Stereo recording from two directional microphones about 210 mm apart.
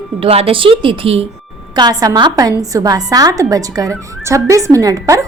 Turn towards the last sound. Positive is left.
turn(degrees=-15)  # may be behind; listen again after turning